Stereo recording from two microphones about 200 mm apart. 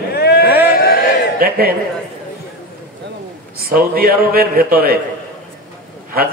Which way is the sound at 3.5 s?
50° right (ahead or behind).